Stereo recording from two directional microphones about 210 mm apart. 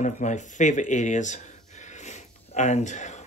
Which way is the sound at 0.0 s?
35° left (ahead or behind).